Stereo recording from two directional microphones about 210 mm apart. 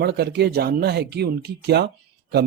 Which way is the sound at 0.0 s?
50° right (ahead or behind).